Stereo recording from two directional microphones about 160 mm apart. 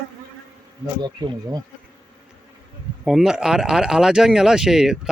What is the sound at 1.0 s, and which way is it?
Speech, 25° right (ahead or behind).